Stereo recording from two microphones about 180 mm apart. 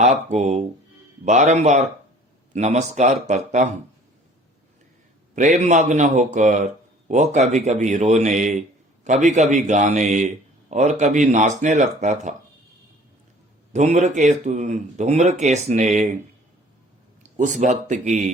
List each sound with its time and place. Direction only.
0.0 s speech: 40° right (ahead or behind)
5.3 s speech: 40° right (ahead or behind)
13.7 s speech: 40° right (ahead or behind)
17.3 s speech: 45° right (ahead or behind)